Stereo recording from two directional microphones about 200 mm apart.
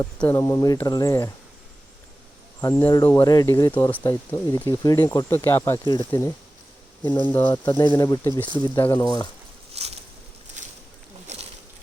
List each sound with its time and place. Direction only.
0.0 s speech: 10° left (ahead or behind)
2.6 s speech: 15° left (ahead or behind)
7.3 s speech: 10° left (ahead or behind)
7.5 s speech: 20° left (ahead or behind)
9.7 s a sound: 30° right (ahead or behind)